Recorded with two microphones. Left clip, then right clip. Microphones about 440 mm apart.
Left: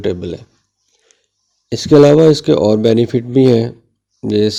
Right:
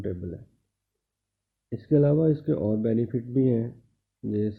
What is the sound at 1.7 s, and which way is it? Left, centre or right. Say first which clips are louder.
Speech: left 16 dB; left.